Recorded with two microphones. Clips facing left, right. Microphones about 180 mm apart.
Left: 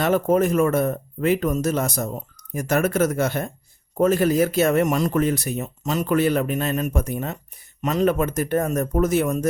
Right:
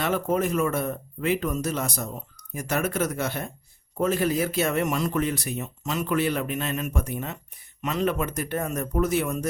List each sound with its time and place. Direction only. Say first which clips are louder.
0.0 s speech: left 6 dB; 45° left (ahead or behind)